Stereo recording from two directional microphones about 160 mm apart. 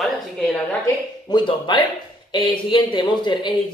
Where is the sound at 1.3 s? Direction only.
30° left (ahead or behind).